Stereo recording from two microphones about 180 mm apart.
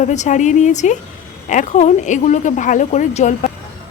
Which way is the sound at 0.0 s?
40° left (ahead or behind).